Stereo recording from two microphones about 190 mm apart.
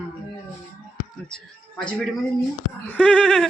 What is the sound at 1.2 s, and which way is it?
Speech, 5° left (ahead or behind).